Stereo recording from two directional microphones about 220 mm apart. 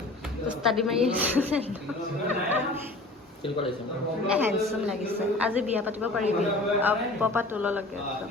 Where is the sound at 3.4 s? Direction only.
25° left (ahead or behind).